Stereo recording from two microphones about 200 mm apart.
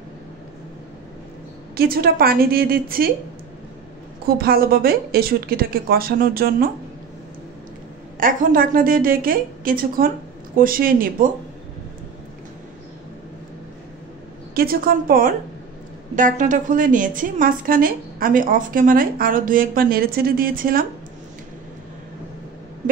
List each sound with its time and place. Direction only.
1.8 s a woman's voice: 50° right (ahead or behind)
4.3 s a woman's voice: 50° right (ahead or behind)
8.2 s a woman's voice: 45° right (ahead or behind)
14.5 s a woman's voice: 50° right (ahead or behind)